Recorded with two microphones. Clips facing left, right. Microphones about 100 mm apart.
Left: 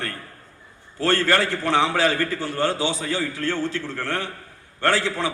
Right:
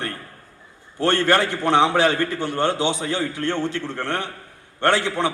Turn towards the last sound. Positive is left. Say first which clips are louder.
# right 2 dB
turn(degrees=-20)  # may be behind; listen again after turning